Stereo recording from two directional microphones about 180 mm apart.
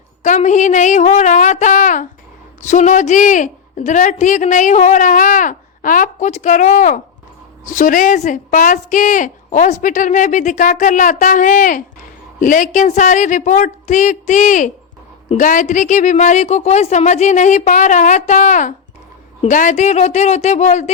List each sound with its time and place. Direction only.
0.2 s a woman's voice: 40° left (ahead or behind)